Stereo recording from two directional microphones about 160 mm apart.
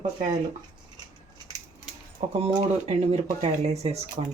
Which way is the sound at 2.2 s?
35° right (ahead or behind).